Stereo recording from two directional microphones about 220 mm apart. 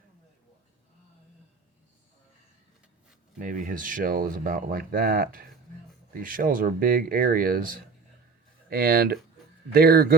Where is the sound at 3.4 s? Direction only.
35° right (ahead or behind).